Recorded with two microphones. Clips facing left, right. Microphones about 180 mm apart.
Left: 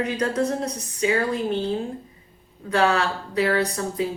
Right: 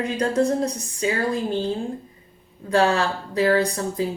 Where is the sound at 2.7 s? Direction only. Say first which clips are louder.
Right 1 dB; 30° right (ahead or behind).